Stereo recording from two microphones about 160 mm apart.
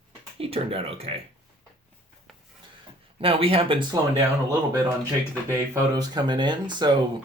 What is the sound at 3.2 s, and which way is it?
Speech, 35° right (ahead or behind).